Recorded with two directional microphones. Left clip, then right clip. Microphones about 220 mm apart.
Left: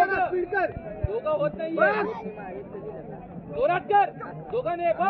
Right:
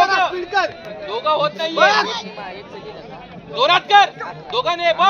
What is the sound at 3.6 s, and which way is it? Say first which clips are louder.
A man's voice: right 9 dB; 60° right (ahead or behind).